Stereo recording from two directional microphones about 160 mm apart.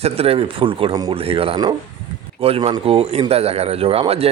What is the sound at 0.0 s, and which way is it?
Speech, 40° right (ahead or behind).